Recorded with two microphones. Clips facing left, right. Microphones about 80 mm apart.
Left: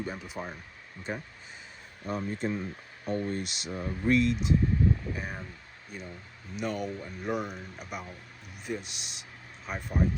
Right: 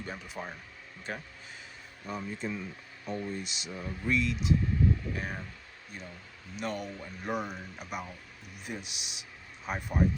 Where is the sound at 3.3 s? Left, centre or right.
Left.